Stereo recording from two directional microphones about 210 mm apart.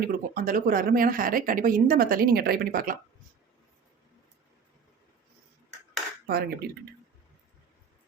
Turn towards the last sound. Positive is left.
turn(degrees=-50)  # may be behind; listen again after turning